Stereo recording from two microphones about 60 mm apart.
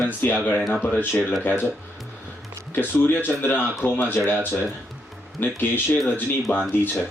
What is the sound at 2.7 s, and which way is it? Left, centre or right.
Speech, left.